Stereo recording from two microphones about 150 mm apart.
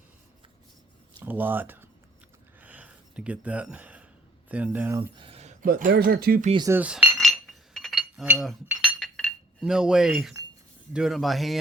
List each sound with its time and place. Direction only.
1.2 s speech: 15° right (ahead or behind)
2.6 s a sound: 10° right (ahead or behind)
4.4 s speech: 10° right (ahead or behind)
4.9 s a sound: 35° right (ahead or behind)
5.6 s speech: 90° right
6.7 s speech: 10° right (ahead or behind)
7.2 s chink: centre (ahead or behind)
9.0 s chink: 5° left (ahead or behind)
9.6 s speech: 5° right (ahead or behind)